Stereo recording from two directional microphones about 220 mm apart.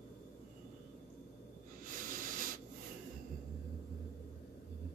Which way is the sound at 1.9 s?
40° right (ahead or behind).